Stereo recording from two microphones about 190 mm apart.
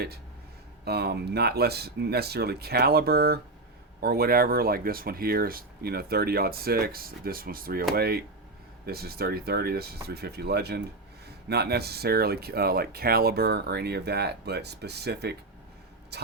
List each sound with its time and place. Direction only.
0.9 s speech: 60° right (ahead or behind)